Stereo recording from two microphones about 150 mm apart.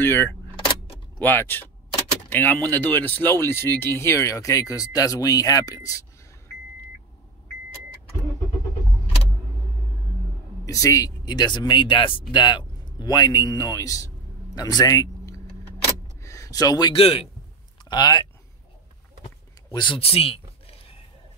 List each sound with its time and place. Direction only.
0.0 s speech: 15° left (ahead or behind)
10.6 s speech: 20° left (ahead or behind)
16.2 s a sound: 20° left (ahead or behind)
17.0 s a man's voice: 40° left (ahead or behind)
17.8 s speech: 25° left (ahead or behind)
19.7 s speech: 30° left (ahead or behind)